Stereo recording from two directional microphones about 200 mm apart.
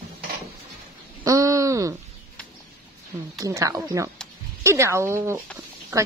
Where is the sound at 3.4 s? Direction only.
15° right (ahead or behind).